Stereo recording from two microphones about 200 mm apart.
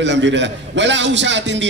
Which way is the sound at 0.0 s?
65° right (ahead or behind).